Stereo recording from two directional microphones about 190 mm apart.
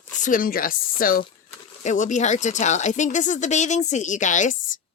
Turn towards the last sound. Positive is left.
turn(degrees=40)  # may be behind; listen again after turning